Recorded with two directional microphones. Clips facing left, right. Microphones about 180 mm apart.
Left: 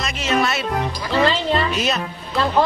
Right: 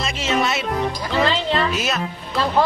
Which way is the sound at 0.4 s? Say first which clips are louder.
Left 1 dB; 20° right (ahead or behind).